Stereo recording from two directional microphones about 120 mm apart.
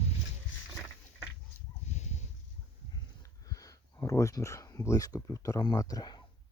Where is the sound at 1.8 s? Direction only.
70° left (ahead or behind).